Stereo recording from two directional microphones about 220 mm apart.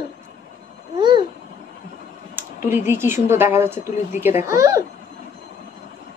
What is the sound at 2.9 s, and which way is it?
A woman's voice, 10° right (ahead or behind).